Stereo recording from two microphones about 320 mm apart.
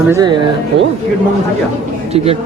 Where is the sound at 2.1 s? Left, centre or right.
Centre.